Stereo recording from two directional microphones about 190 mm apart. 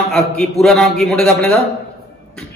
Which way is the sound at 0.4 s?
Centre (ahead or behind).